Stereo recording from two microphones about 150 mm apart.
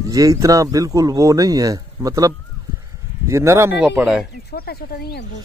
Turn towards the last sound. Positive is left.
turn(degrees=90)